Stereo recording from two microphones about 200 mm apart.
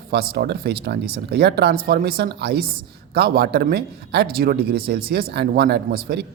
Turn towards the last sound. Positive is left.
turn(degrees=-55)  # may be behind; listen again after turning